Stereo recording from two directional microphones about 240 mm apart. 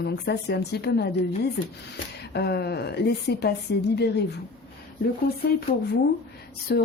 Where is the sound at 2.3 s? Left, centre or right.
Left.